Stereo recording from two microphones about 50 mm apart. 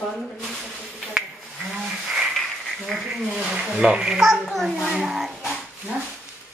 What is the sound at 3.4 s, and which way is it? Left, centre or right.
A child's voice, centre.